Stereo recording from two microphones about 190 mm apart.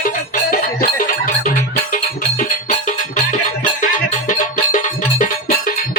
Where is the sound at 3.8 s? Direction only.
45° left (ahead or behind).